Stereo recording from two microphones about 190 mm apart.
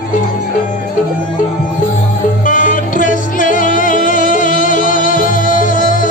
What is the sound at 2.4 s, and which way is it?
Music, 45° left (ahead or behind).